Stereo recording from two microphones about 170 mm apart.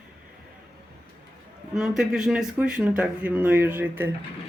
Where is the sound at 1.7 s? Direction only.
5° right (ahead or behind).